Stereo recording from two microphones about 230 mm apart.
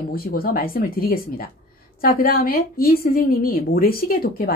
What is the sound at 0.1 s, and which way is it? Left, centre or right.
A woman's voice, left.